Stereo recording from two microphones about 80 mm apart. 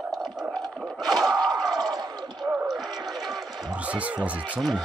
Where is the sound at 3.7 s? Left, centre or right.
Centre.